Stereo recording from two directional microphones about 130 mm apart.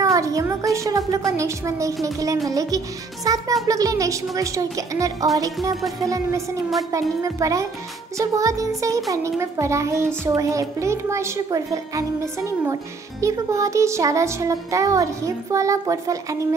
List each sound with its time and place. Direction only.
0.0 s a child's voice: 25° right (ahead or behind)